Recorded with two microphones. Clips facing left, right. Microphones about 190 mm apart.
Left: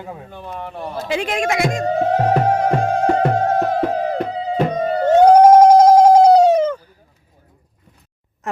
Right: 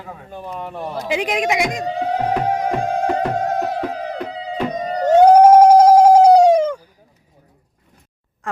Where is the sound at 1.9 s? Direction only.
45° left (ahead or behind).